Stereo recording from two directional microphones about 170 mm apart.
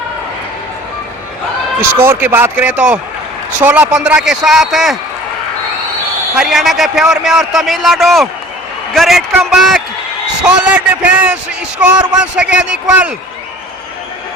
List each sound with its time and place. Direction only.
1.8 s a man's voice: 15° right (ahead or behind)
6.3 s speech: centre (ahead or behind)
10.4 s a sound: 5° right (ahead or behind)
11.8 s a man's voice: 5° right (ahead or behind)